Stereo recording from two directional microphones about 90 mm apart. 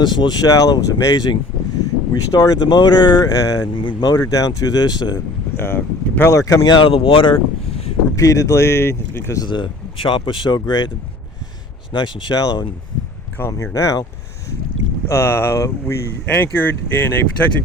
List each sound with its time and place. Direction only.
0.0 s speech: 55° left (ahead or behind)
3.8 s speech: 65° left (ahead or behind)
4.1 s speech: 40° left (ahead or behind)
5.5 s speech: 25° left (ahead or behind)
6.7 s speech: 75° left (ahead or behind)
8.1 s speech: 35° left (ahead or behind)
9.5 s speech: 65° left (ahead or behind)
12.4 s speech: 45° left (ahead or behind)
15.0 s speech: 30° left (ahead or behind)
16.2 s speech: 20° left (ahead or behind)